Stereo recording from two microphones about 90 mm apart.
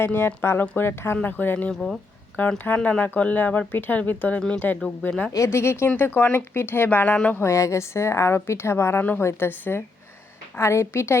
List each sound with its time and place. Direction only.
0.0 s speech: 25° left (ahead or behind)
5.3 s speech: 35° left (ahead or behind); by 7.4 s 15° left (ahead or behind)
7.4 s a woman's voice: 35° left (ahead or behind)